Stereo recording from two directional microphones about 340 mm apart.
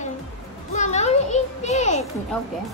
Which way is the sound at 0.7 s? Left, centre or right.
Centre.